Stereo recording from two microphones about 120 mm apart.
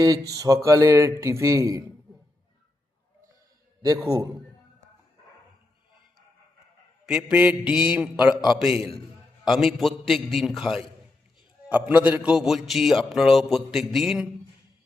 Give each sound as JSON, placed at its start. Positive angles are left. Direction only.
{"t": 0.0, "sound": "music", "side_deg": -30}
{"t": 3.8, "sound": "music", "side_deg": -30}
{"t": 7.0, "sound": "a man's voice", "side_deg": -5}